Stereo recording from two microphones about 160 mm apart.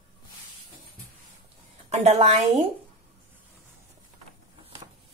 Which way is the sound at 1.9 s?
40° right (ahead or behind).